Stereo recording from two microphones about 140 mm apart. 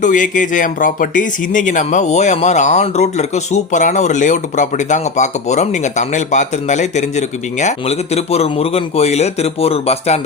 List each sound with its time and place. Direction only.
0.0 s speech: 65° left (ahead or behind); by 10.2 s 45° left (ahead or behind)